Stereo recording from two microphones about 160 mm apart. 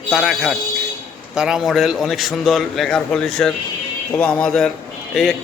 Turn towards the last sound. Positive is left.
turn(degrees=0)  # may be behind; listen again after turning